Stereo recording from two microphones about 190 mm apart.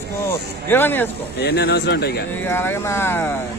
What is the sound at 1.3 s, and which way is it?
Speech, 60° left (ahead or behind).